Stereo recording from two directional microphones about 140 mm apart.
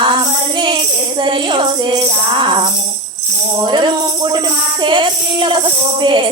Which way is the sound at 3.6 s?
35° right (ahead or behind).